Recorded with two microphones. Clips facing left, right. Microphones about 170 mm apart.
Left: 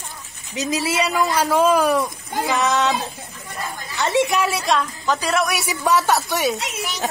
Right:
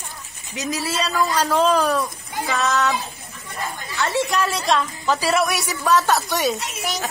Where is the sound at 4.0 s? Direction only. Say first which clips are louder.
Left 3 dB; 20° left (ahead or behind).